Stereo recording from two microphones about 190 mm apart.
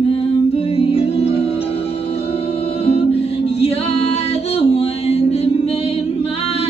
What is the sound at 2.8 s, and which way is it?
Music, 30° left (ahead or behind).